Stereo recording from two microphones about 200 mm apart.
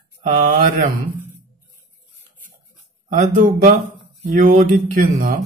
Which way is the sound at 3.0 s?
40° right (ahead or behind).